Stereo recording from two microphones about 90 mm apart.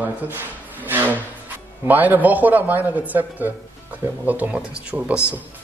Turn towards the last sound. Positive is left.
turn(degrees=-10)  # may be behind; listen again after turning